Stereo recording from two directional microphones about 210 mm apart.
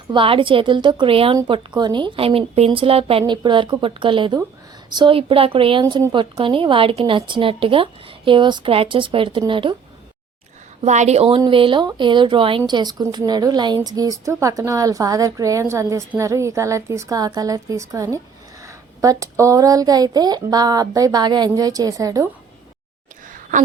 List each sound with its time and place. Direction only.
0.1 s a woman's voice: 25° right (ahead or behind)
10.8 s speech: 35° right (ahead or behind); by 22.3 s 15° right (ahead or behind)